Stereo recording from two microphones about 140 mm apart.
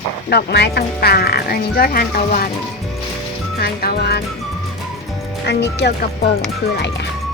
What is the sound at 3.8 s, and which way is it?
Speech, 90° left.